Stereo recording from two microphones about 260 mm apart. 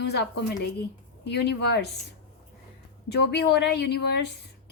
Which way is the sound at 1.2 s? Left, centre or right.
Left.